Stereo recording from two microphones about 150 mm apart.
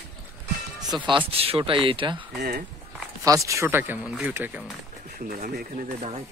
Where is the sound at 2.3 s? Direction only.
90° right.